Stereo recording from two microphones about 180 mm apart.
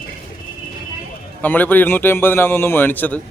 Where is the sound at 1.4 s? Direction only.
10° left (ahead or behind).